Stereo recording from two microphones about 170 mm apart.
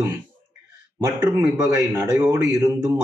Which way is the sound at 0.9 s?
15° right (ahead or behind).